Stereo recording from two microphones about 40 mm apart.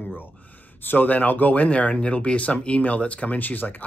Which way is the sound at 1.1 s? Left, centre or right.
Left.